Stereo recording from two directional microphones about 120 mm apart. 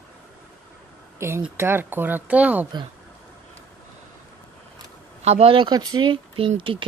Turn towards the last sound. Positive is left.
turn(degrees=-45)  # may be behind; listen again after turning